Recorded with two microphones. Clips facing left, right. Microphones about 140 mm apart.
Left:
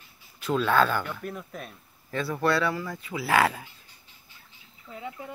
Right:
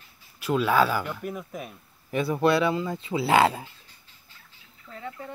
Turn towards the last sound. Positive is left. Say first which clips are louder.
# even
turn(degrees=10)  # may be behind; listen again after turning